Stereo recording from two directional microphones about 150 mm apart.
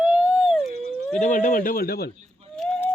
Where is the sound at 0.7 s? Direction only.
90° right.